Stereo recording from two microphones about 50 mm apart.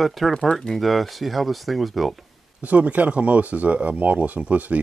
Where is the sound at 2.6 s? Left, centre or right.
Right.